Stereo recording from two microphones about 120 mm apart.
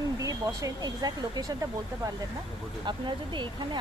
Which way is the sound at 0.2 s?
30° right (ahead or behind).